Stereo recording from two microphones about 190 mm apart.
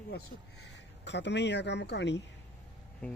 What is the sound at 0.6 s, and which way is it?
A man's voice, 65° left (ahead or behind).